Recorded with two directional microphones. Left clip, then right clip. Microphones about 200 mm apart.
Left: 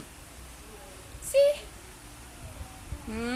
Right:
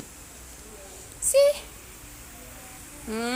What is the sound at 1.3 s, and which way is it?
Speech, 20° right (ahead or behind).